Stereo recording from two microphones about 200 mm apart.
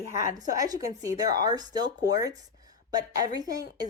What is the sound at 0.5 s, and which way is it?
Speech, 20° right (ahead or behind).